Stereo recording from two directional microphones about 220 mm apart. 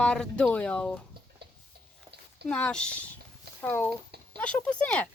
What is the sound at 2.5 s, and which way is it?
A woman's voice, 5° left (ahead or behind).